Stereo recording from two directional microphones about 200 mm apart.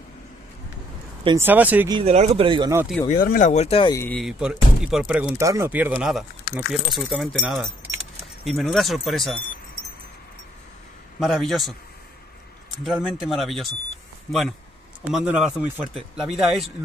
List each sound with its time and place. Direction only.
1.2 s speech: 15° right (ahead or behind)
1.9 s speech: 30° right (ahead or behind)
3.1 s speech: 45° left (ahead or behind)
3.9 s speech: 10° left (ahead or behind)
4.2 s speech: 5° right (ahead or behind)
11.1 s speech: centre (ahead or behind)
12.8 s speech: centre (ahead or behind)
15.0 s speech: 5° right (ahead or behind)